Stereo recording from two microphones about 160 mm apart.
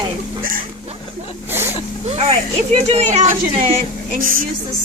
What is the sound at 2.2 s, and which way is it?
A child's voice, 35° right (ahead or behind).